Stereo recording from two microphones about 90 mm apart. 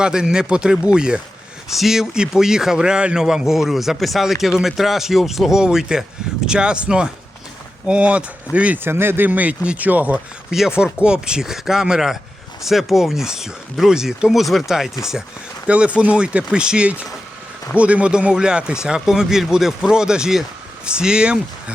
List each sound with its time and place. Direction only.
0.0 s a man's voice: 10° right (ahead or behind)
10.5 s a man's voice: 5° right (ahead or behind)